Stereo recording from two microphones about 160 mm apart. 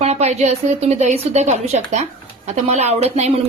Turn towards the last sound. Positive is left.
turn(degrees=-45)  # may be behind; listen again after turning